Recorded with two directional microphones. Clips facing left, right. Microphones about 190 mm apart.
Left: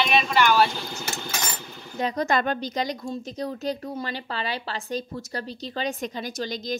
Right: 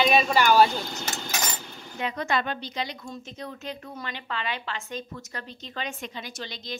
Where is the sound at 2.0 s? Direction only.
40° left (ahead or behind).